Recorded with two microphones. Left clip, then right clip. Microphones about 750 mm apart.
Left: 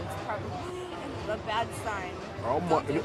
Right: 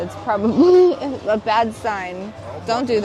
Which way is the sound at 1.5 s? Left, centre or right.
Right.